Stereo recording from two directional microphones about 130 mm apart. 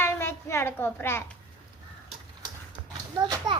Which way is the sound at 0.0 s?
20° left (ahead or behind).